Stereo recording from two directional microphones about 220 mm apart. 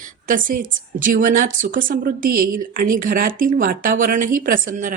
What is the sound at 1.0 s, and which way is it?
Speech, 35° right (ahead or behind).